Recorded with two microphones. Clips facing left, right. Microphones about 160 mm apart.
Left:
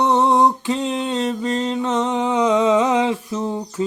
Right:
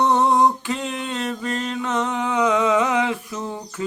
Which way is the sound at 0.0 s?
20° left (ahead or behind).